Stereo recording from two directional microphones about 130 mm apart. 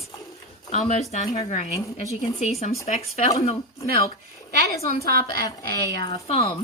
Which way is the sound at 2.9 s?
60° left (ahead or behind).